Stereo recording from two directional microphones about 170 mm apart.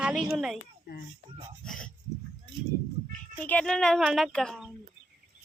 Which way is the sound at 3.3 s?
10° left (ahead or behind).